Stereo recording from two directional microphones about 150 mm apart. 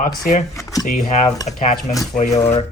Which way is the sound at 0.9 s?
55° left (ahead or behind).